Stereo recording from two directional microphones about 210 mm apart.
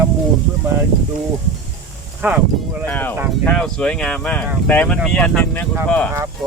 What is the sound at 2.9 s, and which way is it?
Speech, 10° left (ahead or behind).